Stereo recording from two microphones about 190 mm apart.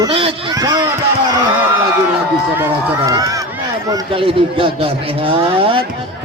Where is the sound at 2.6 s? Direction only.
20° right (ahead or behind).